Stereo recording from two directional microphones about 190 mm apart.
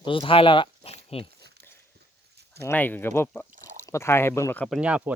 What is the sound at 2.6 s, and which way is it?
Speech, 10° left (ahead or behind).